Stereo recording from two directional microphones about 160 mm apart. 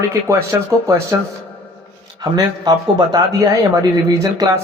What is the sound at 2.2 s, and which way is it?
Speech, 25° right (ahead or behind).